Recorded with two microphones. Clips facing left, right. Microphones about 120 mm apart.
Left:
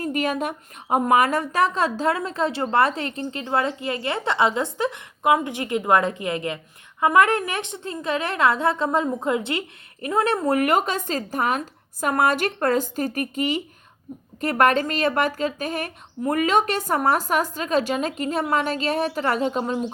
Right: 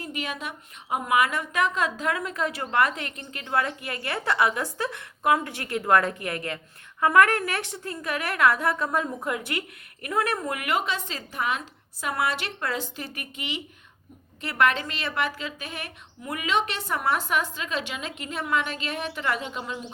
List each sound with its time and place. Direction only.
0.0 s a woman's voice: 45° left (ahead or behind)